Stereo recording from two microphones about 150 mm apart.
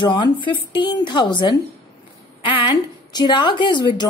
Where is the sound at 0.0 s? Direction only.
30° left (ahead or behind).